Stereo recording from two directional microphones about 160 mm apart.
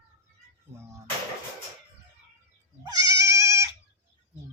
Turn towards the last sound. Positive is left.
turn(degrees=-20)  # may be behind; listen again after turning